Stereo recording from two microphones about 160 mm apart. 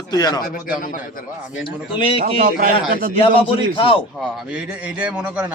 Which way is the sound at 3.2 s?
35° left (ahead or behind).